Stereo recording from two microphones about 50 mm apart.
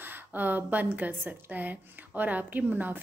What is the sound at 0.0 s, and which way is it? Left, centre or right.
A woman's voice, right.